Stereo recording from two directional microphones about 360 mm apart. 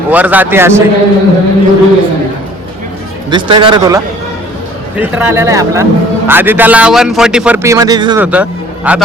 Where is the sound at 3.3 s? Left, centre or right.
Centre.